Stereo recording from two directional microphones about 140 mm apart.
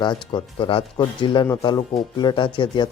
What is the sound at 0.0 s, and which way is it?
Speech, 30° left (ahead or behind).